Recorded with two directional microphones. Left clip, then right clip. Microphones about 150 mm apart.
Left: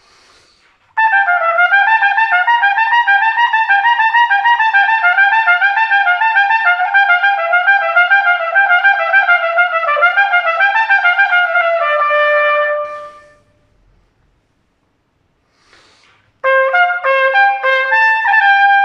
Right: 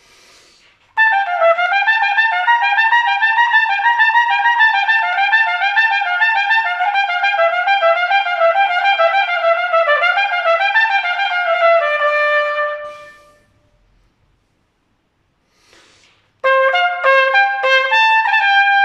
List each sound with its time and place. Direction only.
0.9 s trumpet: 25° right (ahead or behind)
16.3 s trumpet: 25° right (ahead or behind)